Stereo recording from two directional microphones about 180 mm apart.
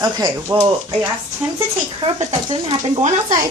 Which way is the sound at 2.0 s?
30° right (ahead or behind).